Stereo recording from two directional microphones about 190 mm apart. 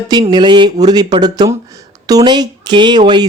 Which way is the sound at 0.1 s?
25° right (ahead or behind).